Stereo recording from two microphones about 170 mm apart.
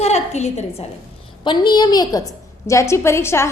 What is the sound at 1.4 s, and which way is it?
A woman's voice, 25° left (ahead or behind).